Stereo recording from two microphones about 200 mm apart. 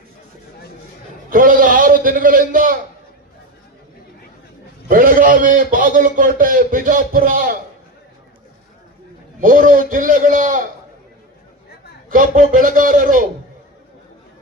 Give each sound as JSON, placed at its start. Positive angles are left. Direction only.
{"t": 1.3, "sound": "a man's voice", "side_deg": -45}
{"t": 4.9, "sound": "a man's voice", "side_deg": -45}
{"t": 9.4, "sound": "a man's voice", "side_deg": -40}
{"t": 12.0, "sound": "a man's voice", "side_deg": -45}